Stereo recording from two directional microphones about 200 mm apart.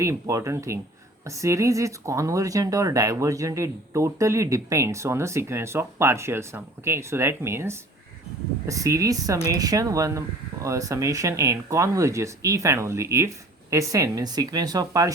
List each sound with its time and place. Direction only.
0.0 s speech: 15° right (ahead or behind)